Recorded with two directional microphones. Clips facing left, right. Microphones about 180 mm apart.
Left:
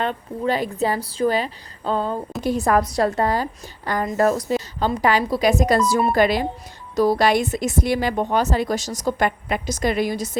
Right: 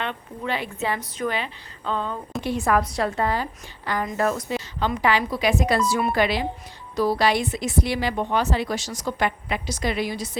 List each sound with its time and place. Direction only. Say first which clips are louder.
0.0 s a woman's voice: left 7 dB; 40° left (ahead or behind)